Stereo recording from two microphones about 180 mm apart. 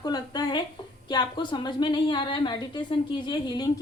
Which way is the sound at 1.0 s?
25° left (ahead or behind).